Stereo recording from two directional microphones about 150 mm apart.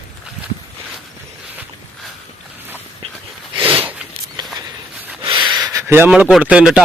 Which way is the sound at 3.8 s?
10° right (ahead or behind).